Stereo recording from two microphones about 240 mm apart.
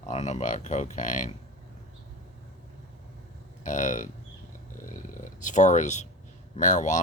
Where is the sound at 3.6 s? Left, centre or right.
Left.